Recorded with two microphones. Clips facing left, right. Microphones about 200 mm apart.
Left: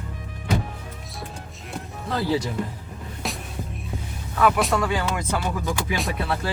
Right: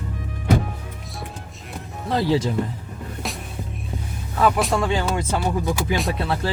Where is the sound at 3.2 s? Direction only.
Centre (ahead or behind).